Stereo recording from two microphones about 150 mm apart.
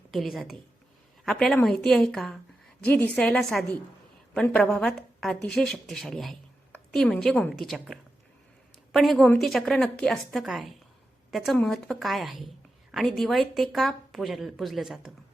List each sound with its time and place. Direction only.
0.1 s a woman's voice: centre (ahead or behind)